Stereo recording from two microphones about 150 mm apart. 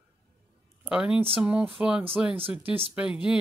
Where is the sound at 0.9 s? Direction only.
5° right (ahead or behind).